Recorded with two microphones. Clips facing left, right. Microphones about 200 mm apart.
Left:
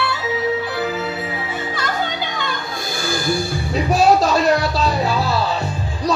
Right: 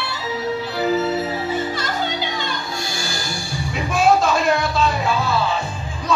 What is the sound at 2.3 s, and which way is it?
Music, 55° left (ahead or behind).